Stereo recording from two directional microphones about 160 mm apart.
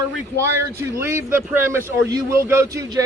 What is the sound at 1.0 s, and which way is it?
Speech, 15° right (ahead or behind).